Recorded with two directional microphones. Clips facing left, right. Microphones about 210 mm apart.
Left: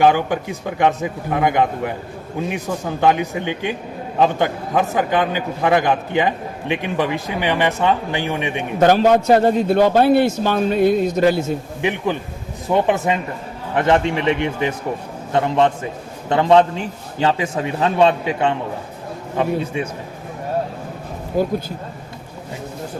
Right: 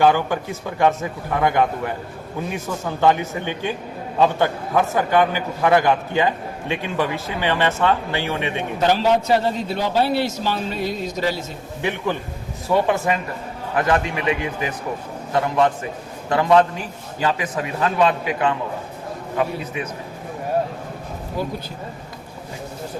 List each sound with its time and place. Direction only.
0.0 s a man's voice: 15° left (ahead or behind)
3.0 s a man's voice: 15° left (ahead or behind)
8.8 s a man's voice: 50° left (ahead or behind)
11.8 s a man's voice: 15° left (ahead or behind)